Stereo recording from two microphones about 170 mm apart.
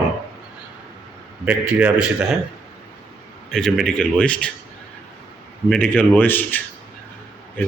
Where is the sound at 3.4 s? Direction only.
5° left (ahead or behind).